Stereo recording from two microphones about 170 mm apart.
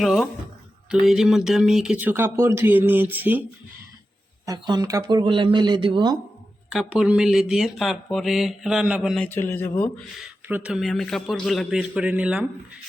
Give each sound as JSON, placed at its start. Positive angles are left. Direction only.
{"t": 0.0, "sound": "speech", "side_deg": 0}
{"t": 4.4, "sound": "speech", "side_deg": -25}
{"t": 6.7, "sound": "a man's voice", "side_deg": -5}
{"t": 10.2, "sound": "speech", "side_deg": -5}